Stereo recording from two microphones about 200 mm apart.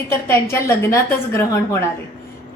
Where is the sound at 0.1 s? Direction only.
15° left (ahead or behind).